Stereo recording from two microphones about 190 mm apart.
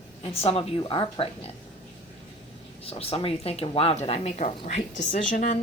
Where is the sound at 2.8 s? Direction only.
30° left (ahead or behind).